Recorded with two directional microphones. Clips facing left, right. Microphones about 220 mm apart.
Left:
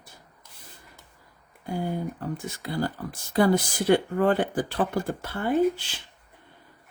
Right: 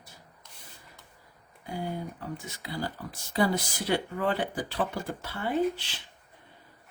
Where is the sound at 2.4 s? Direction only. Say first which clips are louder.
Left 7 dB; 50° left (ahead or behind).